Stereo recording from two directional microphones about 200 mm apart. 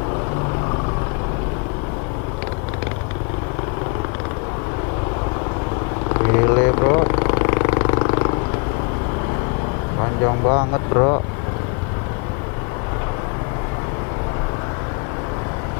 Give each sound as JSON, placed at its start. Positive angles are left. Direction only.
{"t": 6.1, "sound": "vehicle", "side_deg": 20}
{"t": 10.2, "sound": "speech", "side_deg": 25}